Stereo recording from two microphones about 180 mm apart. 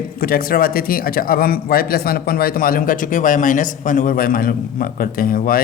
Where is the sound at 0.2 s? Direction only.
55° left (ahead or behind).